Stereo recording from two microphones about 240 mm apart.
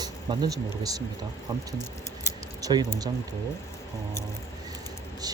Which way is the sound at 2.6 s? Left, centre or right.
Centre.